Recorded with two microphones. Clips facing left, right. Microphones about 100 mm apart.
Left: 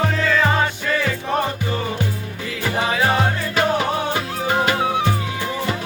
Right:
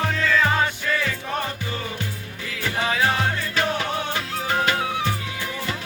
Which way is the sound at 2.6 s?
15° left (ahead or behind).